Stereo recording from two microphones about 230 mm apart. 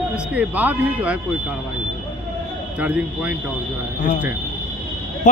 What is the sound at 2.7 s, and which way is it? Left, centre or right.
Speech, centre.